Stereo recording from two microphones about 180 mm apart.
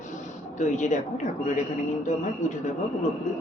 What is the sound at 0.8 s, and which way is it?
Speech, 40° left (ahead or behind).